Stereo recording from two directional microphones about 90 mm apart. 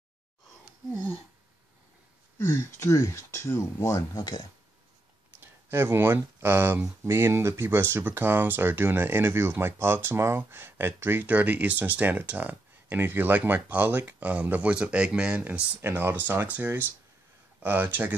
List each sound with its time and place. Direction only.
2.3 s speech: 30° left (ahead or behind)
5.4 s speech: 25° right (ahead or behind)
15.8 s speech: 25° right (ahead or behind)